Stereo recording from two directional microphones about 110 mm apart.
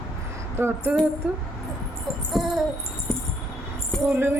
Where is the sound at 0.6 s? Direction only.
25° right (ahead or behind).